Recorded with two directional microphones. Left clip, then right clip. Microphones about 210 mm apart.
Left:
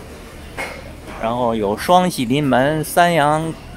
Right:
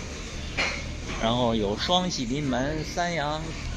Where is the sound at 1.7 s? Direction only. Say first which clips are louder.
Left 11 dB; 30° left (ahead or behind).